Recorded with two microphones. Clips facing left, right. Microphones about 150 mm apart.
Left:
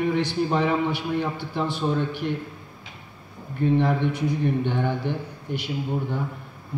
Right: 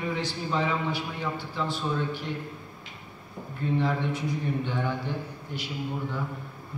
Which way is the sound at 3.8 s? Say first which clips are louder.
Left 5 dB; 60° left (ahead or behind).